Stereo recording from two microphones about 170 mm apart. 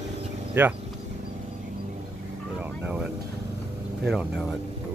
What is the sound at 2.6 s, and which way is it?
Speech, 10° right (ahead or behind).